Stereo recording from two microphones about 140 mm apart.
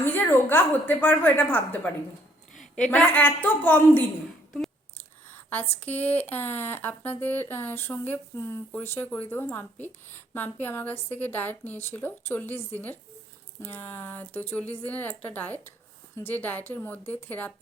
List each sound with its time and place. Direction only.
0.0 s speech: 15° left (ahead or behind)
5.3 s a sound: 15° left (ahead or behind)
5.8 s speech: 10° left (ahead or behind)